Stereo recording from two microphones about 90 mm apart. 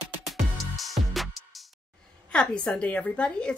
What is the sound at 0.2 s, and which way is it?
Music, centre (ahead or behind).